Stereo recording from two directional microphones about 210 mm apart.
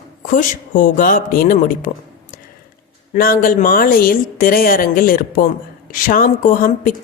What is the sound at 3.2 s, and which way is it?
A woman's voice, 40° left (ahead or behind).